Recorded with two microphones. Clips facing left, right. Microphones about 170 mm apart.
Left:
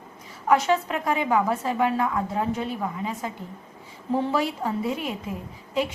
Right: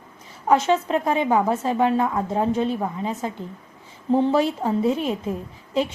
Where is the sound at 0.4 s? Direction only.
25° right (ahead or behind).